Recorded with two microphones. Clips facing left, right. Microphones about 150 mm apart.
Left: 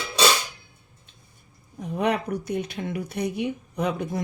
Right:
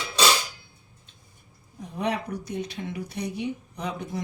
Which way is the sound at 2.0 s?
60° left (ahead or behind).